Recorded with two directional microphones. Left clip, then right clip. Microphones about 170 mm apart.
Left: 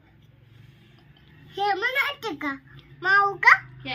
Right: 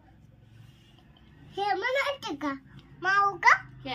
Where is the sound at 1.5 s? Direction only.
20° right (ahead or behind).